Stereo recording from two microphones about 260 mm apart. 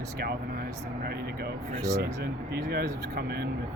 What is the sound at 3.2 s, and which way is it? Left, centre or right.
Speech, right.